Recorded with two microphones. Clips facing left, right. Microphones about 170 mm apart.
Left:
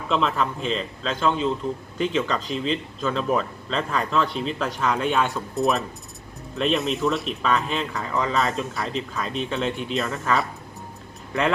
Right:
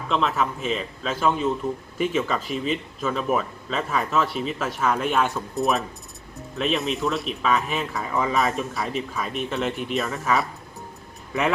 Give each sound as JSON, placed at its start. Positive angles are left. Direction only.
{"t": 0.1, "sound": "a man's voice", "side_deg": 0}
{"t": 8.3, "sound": "speech", "side_deg": -15}
{"t": 8.5, "sound": "a man's voice", "side_deg": 0}